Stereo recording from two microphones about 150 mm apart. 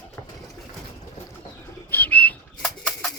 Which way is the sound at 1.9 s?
10° left (ahead or behind).